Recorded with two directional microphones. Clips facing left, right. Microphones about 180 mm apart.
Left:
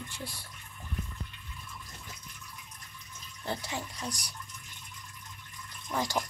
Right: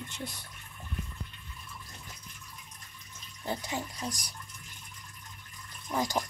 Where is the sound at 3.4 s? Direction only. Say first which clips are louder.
Right 1 dB; 20° right (ahead or behind).